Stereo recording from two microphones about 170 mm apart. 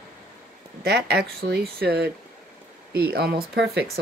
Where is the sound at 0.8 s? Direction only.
70° right (ahead or behind).